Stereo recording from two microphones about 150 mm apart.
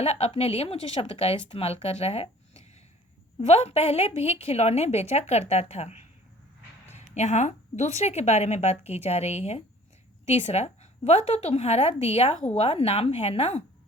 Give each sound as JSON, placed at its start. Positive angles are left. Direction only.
{"t": 0.0, "sound": "a woman's voice", "side_deg": 45}